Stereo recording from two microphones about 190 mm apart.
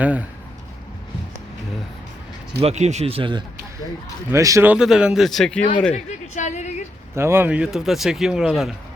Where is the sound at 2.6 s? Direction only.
35° right (ahead or behind).